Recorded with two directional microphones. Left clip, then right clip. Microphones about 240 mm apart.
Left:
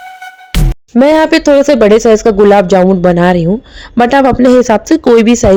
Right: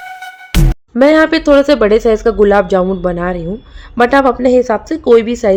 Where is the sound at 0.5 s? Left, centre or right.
Centre.